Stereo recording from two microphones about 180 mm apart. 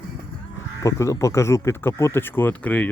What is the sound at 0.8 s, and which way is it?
Speech, 15° left (ahead or behind).